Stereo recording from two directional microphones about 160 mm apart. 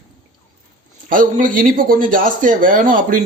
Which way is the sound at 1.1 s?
60° right (ahead or behind).